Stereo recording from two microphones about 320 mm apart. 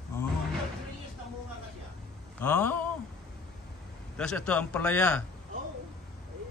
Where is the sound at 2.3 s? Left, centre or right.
Centre.